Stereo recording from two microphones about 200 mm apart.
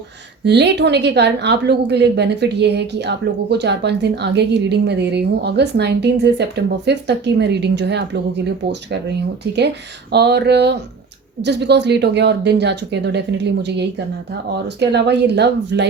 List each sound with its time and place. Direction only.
0.4 s a woman's voice: 60° right (ahead or behind)
10.1 s a woman's voice: 55° right (ahead or behind)